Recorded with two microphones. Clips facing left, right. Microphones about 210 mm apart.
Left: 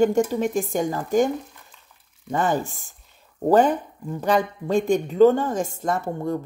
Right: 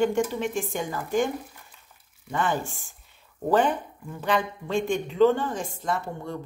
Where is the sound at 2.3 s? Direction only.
40° left (ahead or behind).